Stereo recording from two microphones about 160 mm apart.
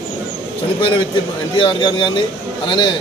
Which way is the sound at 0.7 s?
30° left (ahead or behind).